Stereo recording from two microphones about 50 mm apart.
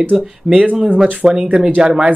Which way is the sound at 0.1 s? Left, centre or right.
Centre.